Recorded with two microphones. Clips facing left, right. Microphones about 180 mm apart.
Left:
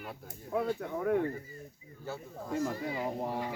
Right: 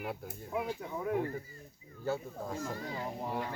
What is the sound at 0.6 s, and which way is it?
Speech, 60° left (ahead or behind).